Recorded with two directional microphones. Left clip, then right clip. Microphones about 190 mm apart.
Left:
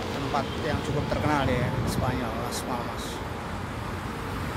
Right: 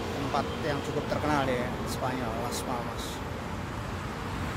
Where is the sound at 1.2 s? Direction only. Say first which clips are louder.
Left 2 dB; centre (ahead or behind).